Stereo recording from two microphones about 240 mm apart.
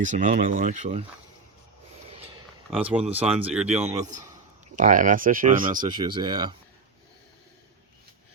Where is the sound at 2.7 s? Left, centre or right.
Centre.